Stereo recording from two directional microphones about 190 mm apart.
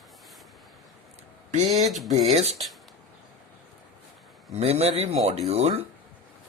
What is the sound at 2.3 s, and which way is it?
Speech, 35° right (ahead or behind).